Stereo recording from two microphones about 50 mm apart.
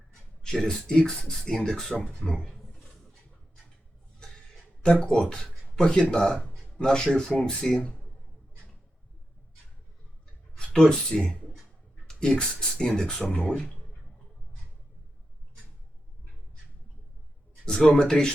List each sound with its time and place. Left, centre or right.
0.1 s speech: centre
4.8 s speech: centre
10.7 s speech: centre
17.7 s speech: centre